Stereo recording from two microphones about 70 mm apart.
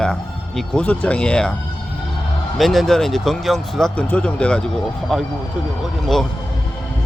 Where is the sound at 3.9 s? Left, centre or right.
Centre.